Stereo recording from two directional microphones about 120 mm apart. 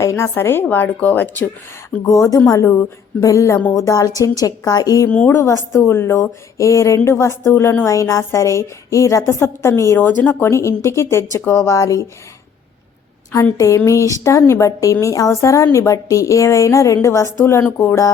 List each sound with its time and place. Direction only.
0.0 s a woman's voice: 25° left (ahead or behind)
2.0 s a woman's voice: 25° left (ahead or behind)
5.0 s a woman's voice: 15° left (ahead or behind)
13.3 s a woman's voice: 25° left (ahead or behind)